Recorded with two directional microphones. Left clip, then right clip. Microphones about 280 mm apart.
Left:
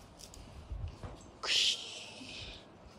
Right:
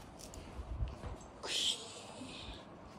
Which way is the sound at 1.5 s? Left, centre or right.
Centre.